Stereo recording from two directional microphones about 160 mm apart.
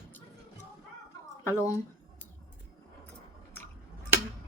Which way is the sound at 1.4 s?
20° left (ahead or behind).